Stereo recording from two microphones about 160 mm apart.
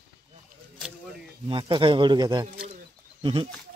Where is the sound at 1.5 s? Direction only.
30° right (ahead or behind).